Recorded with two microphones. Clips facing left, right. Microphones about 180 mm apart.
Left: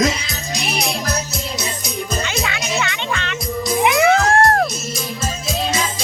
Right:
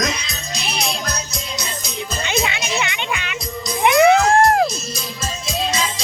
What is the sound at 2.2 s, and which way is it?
Music, 20° right (ahead or behind).